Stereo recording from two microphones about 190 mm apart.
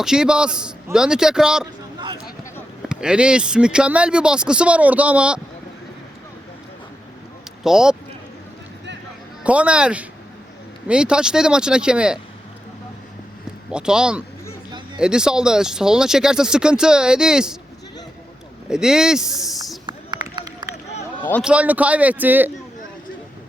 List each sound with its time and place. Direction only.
0.0 s speech: 5° right (ahead or behind)
2.1 s a sound: 15° left (ahead or behind)
2.9 s speech: 5° right (ahead or behind)
7.6 s speech: 5° right (ahead or behind)
9.4 s a man's voice: 5° right (ahead or behind)
13.7 s speech: 5° right (ahead or behind)
18.7 s speech: 5° right (ahead or behind)
19.9 s run: 25° right (ahead or behind)
21.4 s a man's voice: 5° right (ahead or behind)